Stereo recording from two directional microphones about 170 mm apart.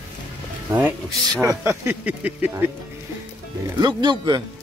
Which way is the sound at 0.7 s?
10° right (ahead or behind).